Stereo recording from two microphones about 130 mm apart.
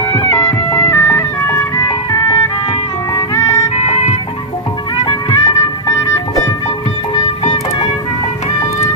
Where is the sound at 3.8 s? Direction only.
55° left (ahead or behind).